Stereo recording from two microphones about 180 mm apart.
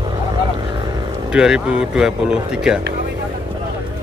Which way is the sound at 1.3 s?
5° right (ahead or behind).